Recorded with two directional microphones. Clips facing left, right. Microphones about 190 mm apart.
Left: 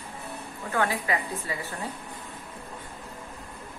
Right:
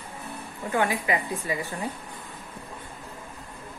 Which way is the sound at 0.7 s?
15° right (ahead or behind).